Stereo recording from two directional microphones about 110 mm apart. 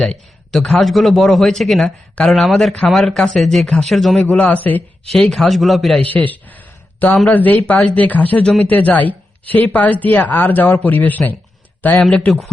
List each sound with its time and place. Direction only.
0.0 s a man's voice: centre (ahead or behind)
4.4 s a man's voice: 15° left (ahead or behind)
6.0 s speech: 15° left (ahead or behind)
7.5 s a man's voice: 5° left (ahead or behind)
7.9 s speech: 15° left (ahead or behind)
11.9 s a man's voice: centre (ahead or behind)